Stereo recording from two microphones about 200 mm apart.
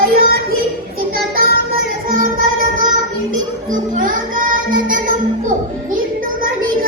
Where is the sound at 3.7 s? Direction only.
45° right (ahead or behind).